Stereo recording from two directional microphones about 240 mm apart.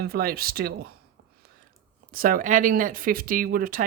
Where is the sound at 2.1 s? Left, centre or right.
Right.